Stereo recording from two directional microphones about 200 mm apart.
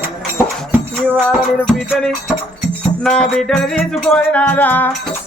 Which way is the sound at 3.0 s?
5° left (ahead or behind).